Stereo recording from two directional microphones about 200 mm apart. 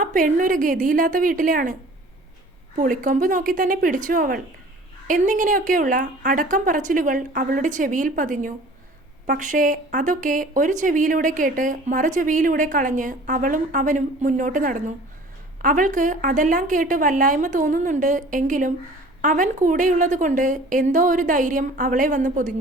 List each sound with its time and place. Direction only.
0.0 s speech: 40° right (ahead or behind)
2.7 s speech: 40° right (ahead or behind)